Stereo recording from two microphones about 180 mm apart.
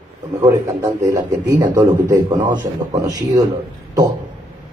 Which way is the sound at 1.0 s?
20° right (ahead or behind).